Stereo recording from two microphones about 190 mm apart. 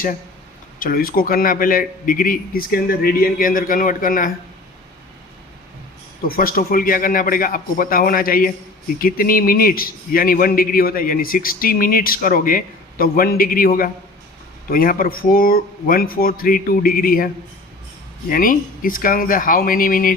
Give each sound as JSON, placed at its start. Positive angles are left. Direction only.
{"t": 0.8, "sound": "a man's voice", "side_deg": 50}
{"t": 6.2, "sound": "a man's voice", "side_deg": 50}
{"t": 18.3, "sound": "a man's voice", "side_deg": 50}